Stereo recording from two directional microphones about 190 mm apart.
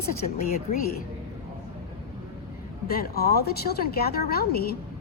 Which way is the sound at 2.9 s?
55° left (ahead or behind).